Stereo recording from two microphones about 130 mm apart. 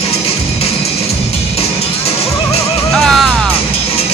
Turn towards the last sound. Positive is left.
turn(degrees=0)  # may be behind; listen again after turning